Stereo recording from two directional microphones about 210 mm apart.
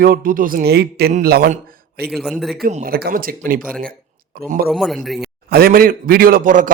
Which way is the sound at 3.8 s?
45° right (ahead or behind).